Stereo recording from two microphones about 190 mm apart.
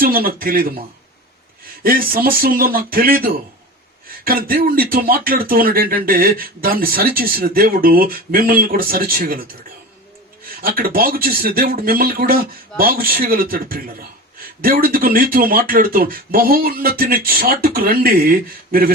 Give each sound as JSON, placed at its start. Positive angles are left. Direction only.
{"t": 0.0, "sound": "speech", "side_deg": -50}
{"t": 1.8, "sound": "speech", "side_deg": -50}
{"t": 10.6, "sound": "speech", "side_deg": -50}